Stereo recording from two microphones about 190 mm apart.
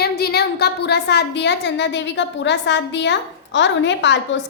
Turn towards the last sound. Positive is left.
turn(degrees=70)  # may be behind; listen again after turning